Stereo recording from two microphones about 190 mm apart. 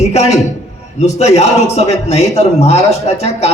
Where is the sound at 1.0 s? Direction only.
35° left (ahead or behind).